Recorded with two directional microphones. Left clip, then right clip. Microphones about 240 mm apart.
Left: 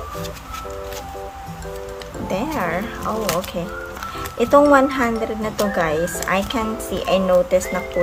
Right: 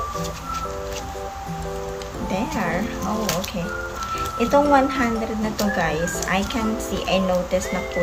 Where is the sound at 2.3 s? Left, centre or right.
Centre.